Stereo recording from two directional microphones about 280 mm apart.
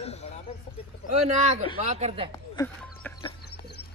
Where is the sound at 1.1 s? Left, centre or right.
Right.